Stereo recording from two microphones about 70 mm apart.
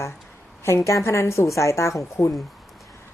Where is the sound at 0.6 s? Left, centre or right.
Left.